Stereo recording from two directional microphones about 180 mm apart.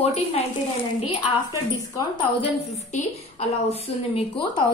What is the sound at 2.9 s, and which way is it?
A woman's voice, 35° left (ahead or behind).